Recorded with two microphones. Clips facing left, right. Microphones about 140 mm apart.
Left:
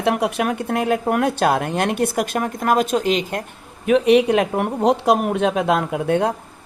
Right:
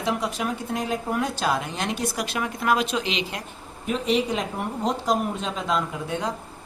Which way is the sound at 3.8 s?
65° left (ahead or behind).